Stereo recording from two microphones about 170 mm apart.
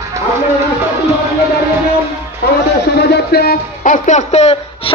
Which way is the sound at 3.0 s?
70° left (ahead or behind).